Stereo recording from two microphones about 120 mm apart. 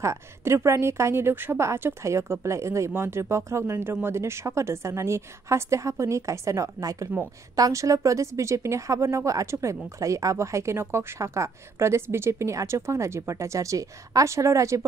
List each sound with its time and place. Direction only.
0.0 s a woman's voice: 25° right (ahead or behind)